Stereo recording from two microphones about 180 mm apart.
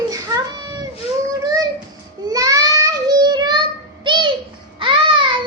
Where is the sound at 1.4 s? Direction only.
20° right (ahead or behind).